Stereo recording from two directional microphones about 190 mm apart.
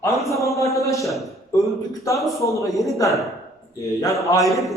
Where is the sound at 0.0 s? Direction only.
15° left (ahead or behind).